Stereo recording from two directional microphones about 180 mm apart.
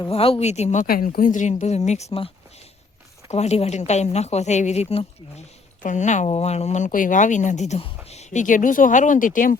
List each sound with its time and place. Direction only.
0.1 s a woman's voice: 30° left (ahead or behind)
0.9 s a woman's voice: 55° left (ahead or behind)